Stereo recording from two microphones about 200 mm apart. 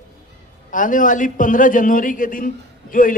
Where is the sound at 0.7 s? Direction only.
40° left (ahead or behind).